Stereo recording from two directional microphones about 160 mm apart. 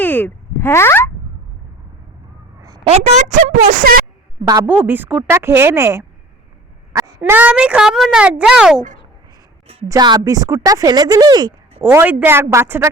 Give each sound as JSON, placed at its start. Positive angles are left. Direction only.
{"t": 0.0, "sound": "a sound", "side_deg": 10}
{"t": 2.6, "sound": "a sound", "side_deg": -20}
{"t": 2.8, "sound": "speech", "side_deg": -40}
{"t": 4.6, "sound": "speech", "side_deg": -10}
{"t": 7.2, "sound": "speech", "side_deg": -10}
{"t": 9.9, "sound": "speech", "side_deg": -25}
{"t": 11.8, "sound": "speech", "side_deg": -15}